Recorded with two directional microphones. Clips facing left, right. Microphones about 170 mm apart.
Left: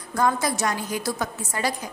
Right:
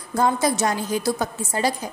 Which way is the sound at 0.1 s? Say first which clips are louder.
Right 3 dB; 25° right (ahead or behind).